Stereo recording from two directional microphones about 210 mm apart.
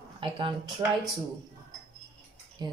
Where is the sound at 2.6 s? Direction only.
20° right (ahead or behind).